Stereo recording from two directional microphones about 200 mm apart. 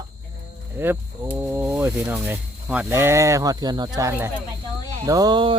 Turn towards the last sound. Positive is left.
turn(degrees=-25)  # may be behind; listen again after turning